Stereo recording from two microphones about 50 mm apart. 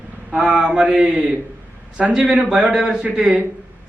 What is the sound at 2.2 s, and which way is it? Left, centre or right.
A man's voice, right.